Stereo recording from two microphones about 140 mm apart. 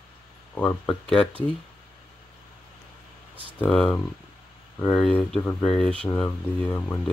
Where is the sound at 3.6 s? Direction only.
10° left (ahead or behind).